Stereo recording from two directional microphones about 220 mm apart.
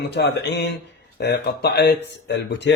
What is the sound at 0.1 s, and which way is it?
Speech, 50° left (ahead or behind).